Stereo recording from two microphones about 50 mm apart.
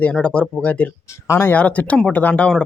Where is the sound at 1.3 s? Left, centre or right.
Left.